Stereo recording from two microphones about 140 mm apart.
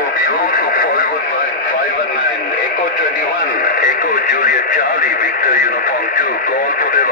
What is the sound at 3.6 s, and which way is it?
Radio, 80° left.